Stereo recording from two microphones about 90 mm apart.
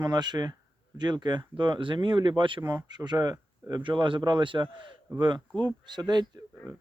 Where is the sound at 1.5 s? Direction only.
65° right (ahead or behind).